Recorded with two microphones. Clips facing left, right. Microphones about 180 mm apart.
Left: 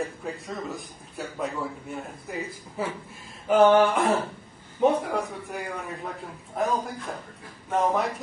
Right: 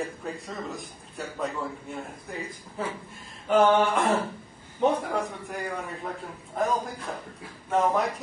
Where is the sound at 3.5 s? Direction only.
5° left (ahead or behind).